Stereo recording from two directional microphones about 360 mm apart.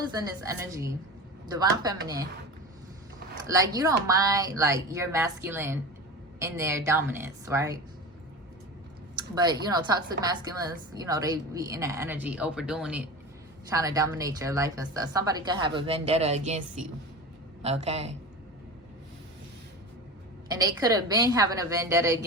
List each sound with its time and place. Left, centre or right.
0.1 s a woman's voice: centre
3.4 s a woman's voice: centre
9.4 s a woman's voice: centre
20.5 s a woman's voice: centre